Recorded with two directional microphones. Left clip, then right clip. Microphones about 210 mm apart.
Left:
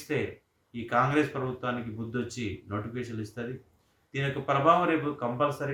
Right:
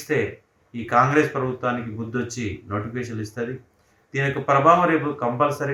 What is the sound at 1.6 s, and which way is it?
Speech, 10° left (ahead or behind).